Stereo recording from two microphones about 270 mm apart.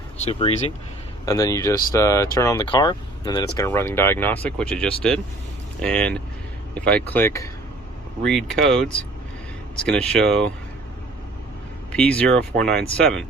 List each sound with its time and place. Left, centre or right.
0.3 s speech: left; by 10.5 s centre
11.9 s speech: centre